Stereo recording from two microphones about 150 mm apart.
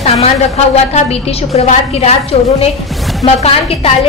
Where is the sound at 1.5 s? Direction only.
45° left (ahead or behind).